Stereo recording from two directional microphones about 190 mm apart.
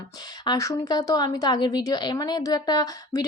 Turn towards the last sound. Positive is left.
turn(degrees=20)  # may be behind; listen again after turning